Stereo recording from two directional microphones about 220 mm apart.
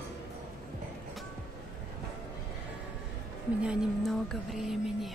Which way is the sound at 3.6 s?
Centre (ahead or behind).